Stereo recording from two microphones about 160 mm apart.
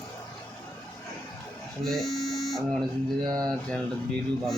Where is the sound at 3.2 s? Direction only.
25° right (ahead or behind).